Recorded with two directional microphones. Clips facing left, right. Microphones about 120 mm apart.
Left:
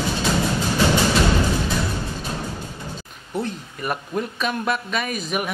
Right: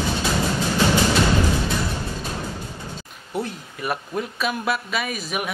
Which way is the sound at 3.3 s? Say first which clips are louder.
Left 1 dB; 5° right (ahead or behind).